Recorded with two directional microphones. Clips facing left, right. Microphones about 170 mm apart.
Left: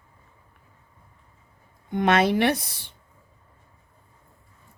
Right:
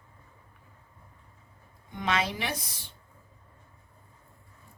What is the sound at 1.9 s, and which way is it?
Speech, 60° left (ahead or behind).